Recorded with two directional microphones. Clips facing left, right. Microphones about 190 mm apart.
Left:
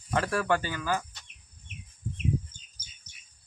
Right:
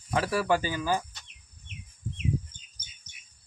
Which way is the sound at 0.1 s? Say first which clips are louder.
Right 1 dB; 5° right (ahead or behind).